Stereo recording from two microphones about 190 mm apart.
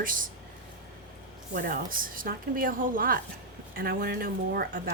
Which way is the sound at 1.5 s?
45° right (ahead or behind).